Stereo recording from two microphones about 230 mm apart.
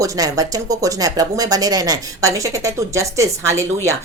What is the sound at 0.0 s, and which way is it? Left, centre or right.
A woman's voice, centre.